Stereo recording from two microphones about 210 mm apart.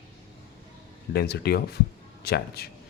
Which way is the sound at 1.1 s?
50° left (ahead or behind).